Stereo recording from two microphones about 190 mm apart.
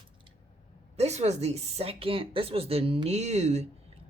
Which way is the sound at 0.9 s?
35° right (ahead or behind).